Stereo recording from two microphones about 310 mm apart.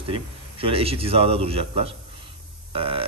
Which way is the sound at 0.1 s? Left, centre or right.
Centre.